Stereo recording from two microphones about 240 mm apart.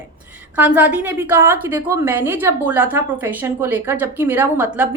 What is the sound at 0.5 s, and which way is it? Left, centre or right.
A woman's voice, centre.